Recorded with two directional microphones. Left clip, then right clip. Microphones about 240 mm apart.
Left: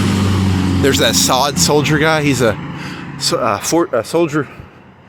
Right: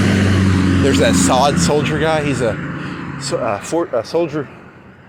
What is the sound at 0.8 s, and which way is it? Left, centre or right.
Speech, left.